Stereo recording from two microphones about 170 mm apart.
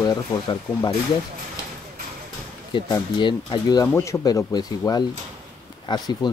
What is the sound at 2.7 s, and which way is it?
Speech, 25° left (ahead or behind).